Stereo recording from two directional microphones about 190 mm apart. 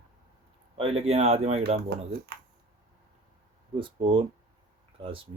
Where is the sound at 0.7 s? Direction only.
30° right (ahead or behind).